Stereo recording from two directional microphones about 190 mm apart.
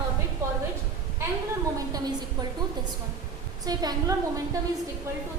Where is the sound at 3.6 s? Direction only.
20° right (ahead or behind).